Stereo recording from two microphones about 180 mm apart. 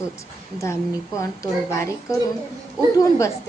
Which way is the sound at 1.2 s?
15° left (ahead or behind).